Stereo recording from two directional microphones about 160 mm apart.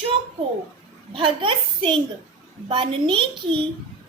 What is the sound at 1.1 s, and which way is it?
Speech, 35° right (ahead or behind).